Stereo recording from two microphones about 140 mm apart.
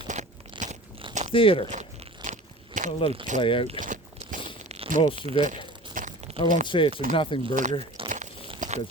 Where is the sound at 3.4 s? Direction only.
40° left (ahead or behind).